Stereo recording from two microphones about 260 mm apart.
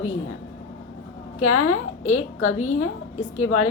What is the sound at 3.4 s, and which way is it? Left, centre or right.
Speech, left.